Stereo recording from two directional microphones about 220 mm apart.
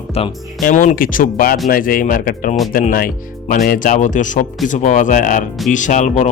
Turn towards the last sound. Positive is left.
turn(degrees=35)  # may be behind; listen again after turning